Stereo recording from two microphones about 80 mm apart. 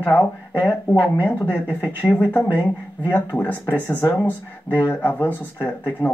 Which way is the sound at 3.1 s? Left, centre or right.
Left.